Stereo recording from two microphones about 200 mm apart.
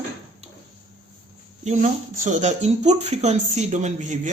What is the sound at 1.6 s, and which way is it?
Speech, 35° right (ahead or behind).